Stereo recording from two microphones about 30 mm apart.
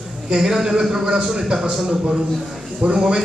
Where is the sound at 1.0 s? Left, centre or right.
Right.